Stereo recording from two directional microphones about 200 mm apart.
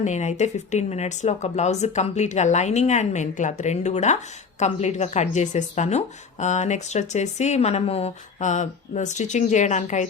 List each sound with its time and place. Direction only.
0.0 s speech: 35° left (ahead or behind)